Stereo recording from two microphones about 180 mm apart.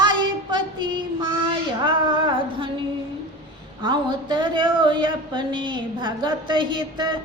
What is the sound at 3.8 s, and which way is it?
Speech, 25° right (ahead or behind).